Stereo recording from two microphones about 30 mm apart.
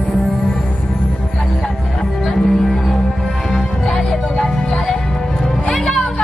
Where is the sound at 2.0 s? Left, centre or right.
Centre.